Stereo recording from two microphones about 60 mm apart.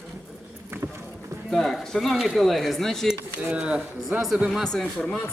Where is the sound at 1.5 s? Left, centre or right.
Centre.